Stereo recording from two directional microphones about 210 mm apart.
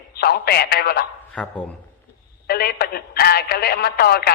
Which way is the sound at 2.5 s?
45° left (ahead or behind).